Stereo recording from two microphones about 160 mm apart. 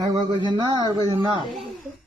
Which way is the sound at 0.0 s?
25° right (ahead or behind).